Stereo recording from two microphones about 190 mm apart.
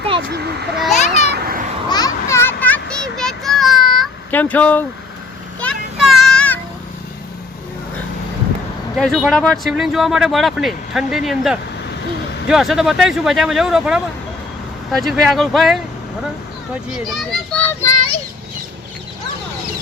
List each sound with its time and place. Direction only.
0.9 s children playing: 35° left (ahead or behind)
1.3 s children playing: 50° right (ahead or behind)
1.9 s children playing: 20° left (ahead or behind)
5.5 s child singing: 5° left (ahead or behind)
9.0 s speech: centre (ahead or behind)
16.9 s a sound: centre (ahead or behind)